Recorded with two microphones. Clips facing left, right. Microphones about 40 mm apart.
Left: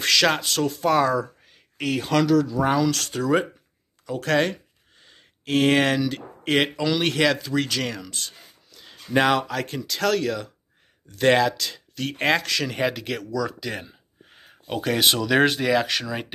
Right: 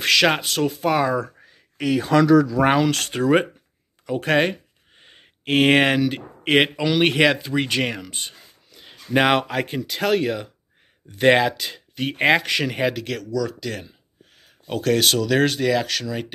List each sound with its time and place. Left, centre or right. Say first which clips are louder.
0.0 s speech: right 2 dB; centre
2.7 s speech: right 3 dB; right
4.0 s a sound: right 2 dB; right
5.9 s speech: right 4 dB; right
8.7 s a sound: right 2 dB; right
9.5 s speech: right 3 dB; right
12.7 s speech: right 2 dB; centre